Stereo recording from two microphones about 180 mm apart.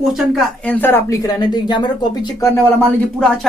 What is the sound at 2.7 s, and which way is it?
Speech, 5° left (ahead or behind).